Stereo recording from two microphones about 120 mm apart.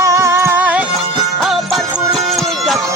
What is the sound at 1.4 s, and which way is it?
Music, centre (ahead or behind).